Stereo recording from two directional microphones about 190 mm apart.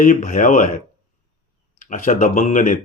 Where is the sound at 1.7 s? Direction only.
40° left (ahead or behind).